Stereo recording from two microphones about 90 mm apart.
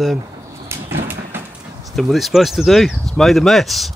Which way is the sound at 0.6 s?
30° right (ahead or behind).